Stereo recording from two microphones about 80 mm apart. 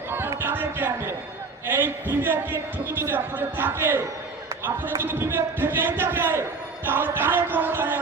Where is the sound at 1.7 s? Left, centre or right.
Right.